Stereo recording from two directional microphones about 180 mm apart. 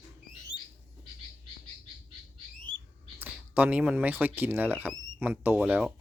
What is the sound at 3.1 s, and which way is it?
Speech, 10° right (ahead or behind).